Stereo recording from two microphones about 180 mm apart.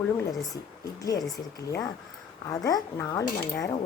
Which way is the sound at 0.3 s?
20° left (ahead or behind).